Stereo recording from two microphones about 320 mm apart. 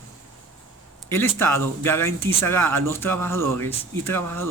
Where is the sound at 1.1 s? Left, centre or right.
Centre.